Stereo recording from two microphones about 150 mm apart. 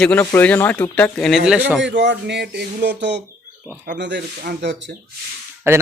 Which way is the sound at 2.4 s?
90° right.